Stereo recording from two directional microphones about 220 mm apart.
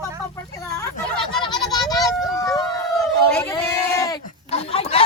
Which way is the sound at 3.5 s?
15° left (ahead or behind).